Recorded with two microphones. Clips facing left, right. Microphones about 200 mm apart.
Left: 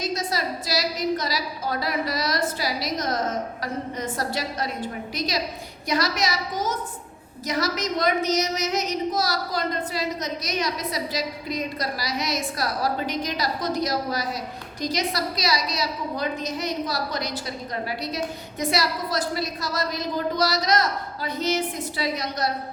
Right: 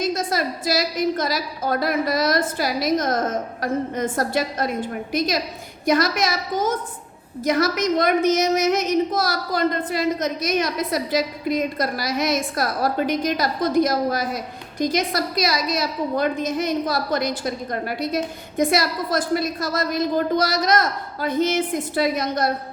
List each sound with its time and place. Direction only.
0.0 s a woman's voice: 50° right (ahead or behind)